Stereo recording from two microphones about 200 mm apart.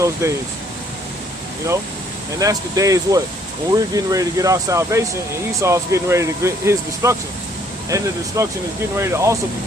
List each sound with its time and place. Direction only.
0.0 s speech: 15° right (ahead or behind)
2.4 s speech: 15° right (ahead or behind)